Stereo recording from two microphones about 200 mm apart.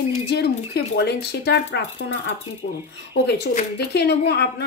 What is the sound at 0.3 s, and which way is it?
A woman's voice, 55° left (ahead or behind).